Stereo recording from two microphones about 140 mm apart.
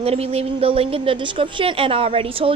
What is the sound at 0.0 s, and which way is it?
A woman's voice, 45° right (ahead or behind).